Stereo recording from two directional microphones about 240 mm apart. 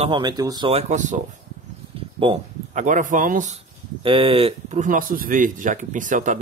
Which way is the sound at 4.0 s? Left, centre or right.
Right.